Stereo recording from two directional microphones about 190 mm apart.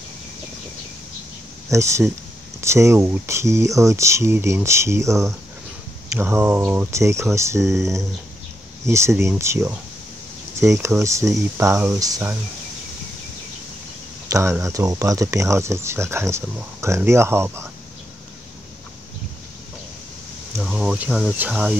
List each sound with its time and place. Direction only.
1.7 s speech: 15° right (ahead or behind)
14.3 s speech: 15° right (ahead or behind)
20.6 s speech: 5° right (ahead or behind)